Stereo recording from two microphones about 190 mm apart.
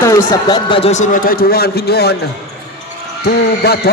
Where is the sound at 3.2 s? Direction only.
55° left (ahead or behind).